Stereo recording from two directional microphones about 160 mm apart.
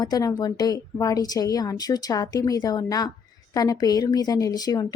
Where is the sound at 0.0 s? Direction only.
25° left (ahead or behind).